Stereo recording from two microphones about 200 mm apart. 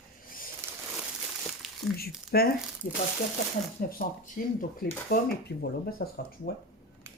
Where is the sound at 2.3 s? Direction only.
55° left (ahead or behind).